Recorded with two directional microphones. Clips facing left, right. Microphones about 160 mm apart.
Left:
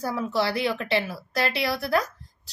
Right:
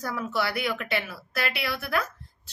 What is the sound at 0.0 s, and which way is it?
A woman's voice, 30° left (ahead or behind).